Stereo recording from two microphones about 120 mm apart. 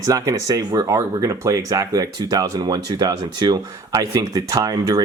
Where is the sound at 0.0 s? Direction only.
30° right (ahead or behind).